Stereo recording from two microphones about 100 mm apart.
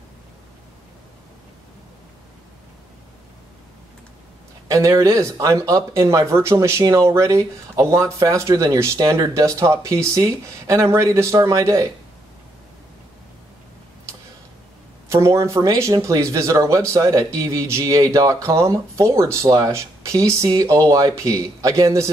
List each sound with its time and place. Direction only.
4.6 s speech: 30° right (ahead or behind)
15.0 s speech: 30° right (ahead or behind)